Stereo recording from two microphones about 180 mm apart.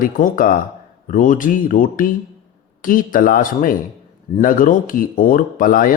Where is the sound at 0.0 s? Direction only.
50° left (ahead or behind).